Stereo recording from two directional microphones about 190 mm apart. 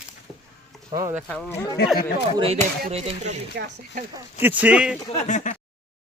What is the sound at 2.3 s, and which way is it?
Speech, 30° right (ahead or behind).